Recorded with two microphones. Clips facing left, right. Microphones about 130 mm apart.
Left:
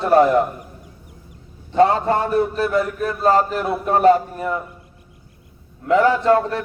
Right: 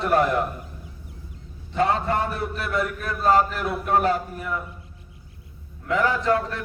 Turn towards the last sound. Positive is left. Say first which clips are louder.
# left 6 dB
turn(degrees=35)  # may be behind; listen again after turning